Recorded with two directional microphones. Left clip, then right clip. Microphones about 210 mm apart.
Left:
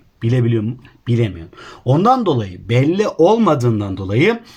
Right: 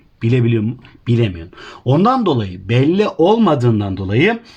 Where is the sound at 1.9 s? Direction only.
35° right (ahead or behind).